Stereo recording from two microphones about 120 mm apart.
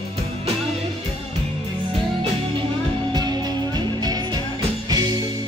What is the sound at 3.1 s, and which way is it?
Music, 35° right (ahead or behind).